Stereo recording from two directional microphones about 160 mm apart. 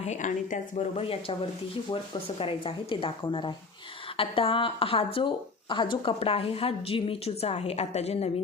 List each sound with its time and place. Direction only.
0.0 s a woman's voice: 50° left (ahead or behind)